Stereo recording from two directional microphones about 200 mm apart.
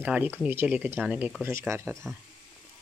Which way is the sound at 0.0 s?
10° right (ahead or behind).